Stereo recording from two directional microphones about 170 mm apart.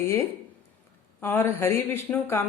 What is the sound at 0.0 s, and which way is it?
A woman's voice, 15° left (ahead or behind).